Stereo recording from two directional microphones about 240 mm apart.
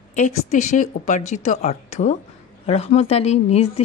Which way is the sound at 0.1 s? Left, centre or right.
Left.